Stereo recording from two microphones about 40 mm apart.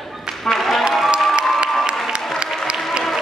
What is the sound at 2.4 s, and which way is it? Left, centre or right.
Applause, right.